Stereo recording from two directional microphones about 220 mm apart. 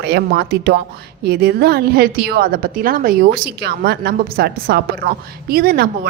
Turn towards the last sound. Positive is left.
turn(degrees=-45)  # may be behind; listen again after turning